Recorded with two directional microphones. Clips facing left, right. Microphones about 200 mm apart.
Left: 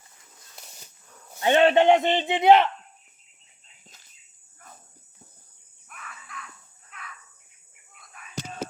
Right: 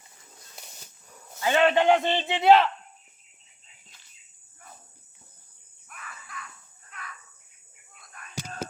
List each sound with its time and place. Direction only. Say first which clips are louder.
0.5 s dog: even; centre (ahead or behind)
1.4 s a man's voice: left 3 dB; 25° left (ahead or behind)
5.9 s crow: even; centre (ahead or behind)
7.9 s a sound: even; centre (ahead or behind)